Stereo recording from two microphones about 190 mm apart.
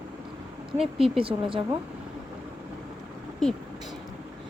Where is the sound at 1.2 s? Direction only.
30° right (ahead or behind).